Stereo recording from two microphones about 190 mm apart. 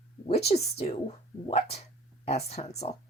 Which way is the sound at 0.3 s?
35° left (ahead or behind).